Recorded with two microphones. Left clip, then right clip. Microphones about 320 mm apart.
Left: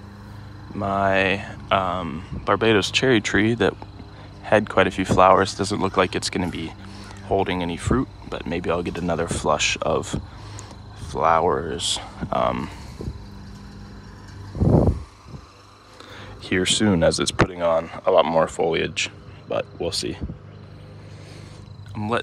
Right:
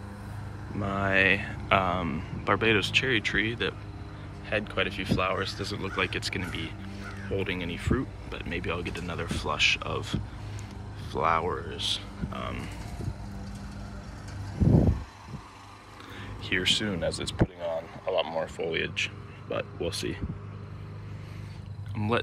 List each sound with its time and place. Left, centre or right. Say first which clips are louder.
0.7 s speech: left 6 dB; centre
11.1 s speech: left 8 dB; centre
16.4 s speech: left 6 dB; centre
17.5 s speech: left 12 dB; left
18.6 s speech: left 7 dB; centre
21.9 s speech: left 4 dB; centre